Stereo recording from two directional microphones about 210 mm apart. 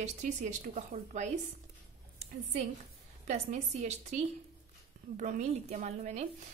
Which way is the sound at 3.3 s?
30° right (ahead or behind).